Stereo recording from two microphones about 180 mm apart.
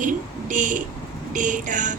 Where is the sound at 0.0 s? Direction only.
45° right (ahead or behind).